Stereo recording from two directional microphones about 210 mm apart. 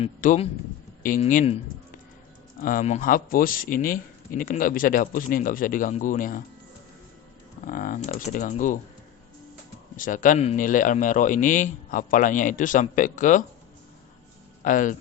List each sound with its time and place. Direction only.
0.0 s speech: 35° left (ahead or behind)
2.6 s speech: 40° left (ahead or behind)
7.7 s speech: 40° left (ahead or behind)
10.0 s speech: 40° left (ahead or behind)
14.6 s speech: 40° left (ahead or behind)